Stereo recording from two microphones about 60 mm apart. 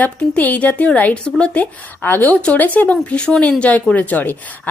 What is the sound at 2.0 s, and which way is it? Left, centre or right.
A woman's voice, left.